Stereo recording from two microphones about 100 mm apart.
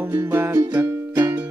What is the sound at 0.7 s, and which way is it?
Music, 15° right (ahead or behind).